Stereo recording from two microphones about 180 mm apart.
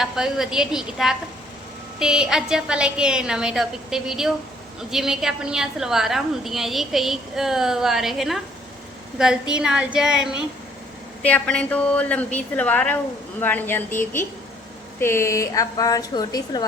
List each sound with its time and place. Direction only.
0.0 s a woman's voice: centre (ahead or behind)
11.2 s a woman's voice: 10° left (ahead or behind)